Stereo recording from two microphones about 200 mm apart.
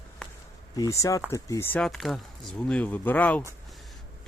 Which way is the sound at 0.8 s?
15° left (ahead or behind).